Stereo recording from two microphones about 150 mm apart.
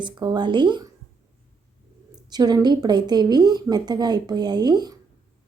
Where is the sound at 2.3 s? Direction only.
25° right (ahead or behind).